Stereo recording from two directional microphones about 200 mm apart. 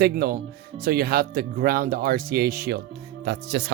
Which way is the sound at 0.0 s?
50° right (ahead or behind).